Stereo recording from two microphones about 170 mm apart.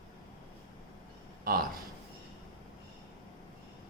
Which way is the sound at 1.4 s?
60° right (ahead or behind).